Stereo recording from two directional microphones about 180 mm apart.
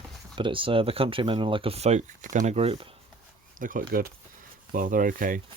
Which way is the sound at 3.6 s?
50° right (ahead or behind).